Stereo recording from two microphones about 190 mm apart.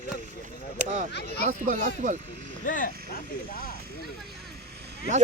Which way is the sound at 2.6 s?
45° left (ahead or behind).